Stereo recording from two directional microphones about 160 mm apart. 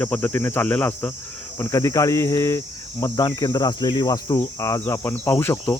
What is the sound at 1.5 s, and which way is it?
Cricket, 20° left (ahead or behind).